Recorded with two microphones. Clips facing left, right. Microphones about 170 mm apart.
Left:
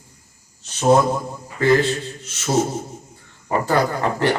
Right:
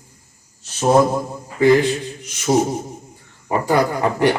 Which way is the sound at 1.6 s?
15° right (ahead or behind).